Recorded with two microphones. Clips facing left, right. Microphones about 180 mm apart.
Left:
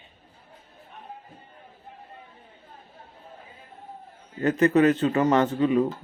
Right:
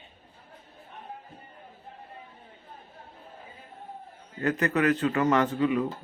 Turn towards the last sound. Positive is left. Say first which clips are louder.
# left 3 dB
turn(degrees=30)  # may be behind; listen again after turning